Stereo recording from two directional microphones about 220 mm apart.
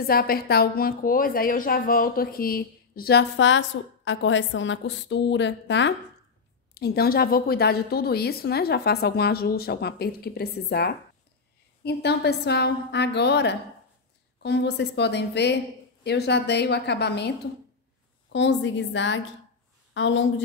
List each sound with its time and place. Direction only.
0.0 s a woman's voice: 40° left (ahead or behind)
18.3 s a woman's voice: 55° left (ahead or behind)